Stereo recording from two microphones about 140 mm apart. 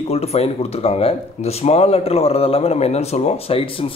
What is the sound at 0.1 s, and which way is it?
Speech, 50° left (ahead or behind).